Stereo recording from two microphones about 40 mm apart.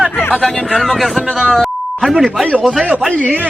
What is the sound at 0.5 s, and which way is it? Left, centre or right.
Speech, centre.